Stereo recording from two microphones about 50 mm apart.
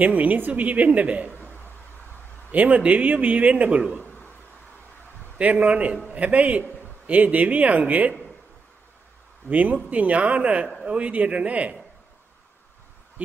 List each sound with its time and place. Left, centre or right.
0.0 s a woman's voice: right
1.3 s a sound: left
2.5 s a woman's voice: right
5.4 s speech: right
9.5 s a woman's voice: right